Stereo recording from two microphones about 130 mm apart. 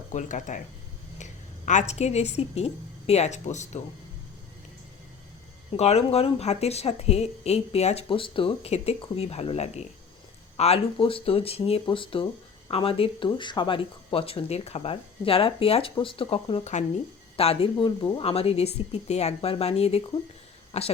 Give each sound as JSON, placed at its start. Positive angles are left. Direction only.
{"t": 0.1, "sound": "a woman's voice", "side_deg": 70}
{"t": 5.7, "sound": "speech", "side_deg": 55}
{"t": 8.0, "sound": "speech", "side_deg": 40}
{"t": 18.2, "sound": "speech", "side_deg": 50}